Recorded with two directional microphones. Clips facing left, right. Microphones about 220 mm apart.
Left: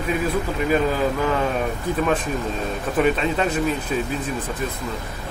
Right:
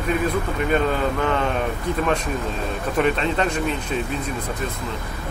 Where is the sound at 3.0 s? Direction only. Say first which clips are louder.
Left 1 dB; 5° left (ahead or behind).